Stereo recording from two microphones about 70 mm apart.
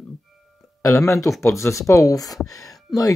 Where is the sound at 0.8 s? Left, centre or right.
Left.